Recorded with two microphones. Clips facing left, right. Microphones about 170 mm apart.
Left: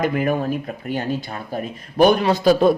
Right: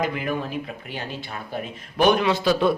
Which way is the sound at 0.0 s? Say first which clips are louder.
Left 6 dB; 50° left (ahead or behind).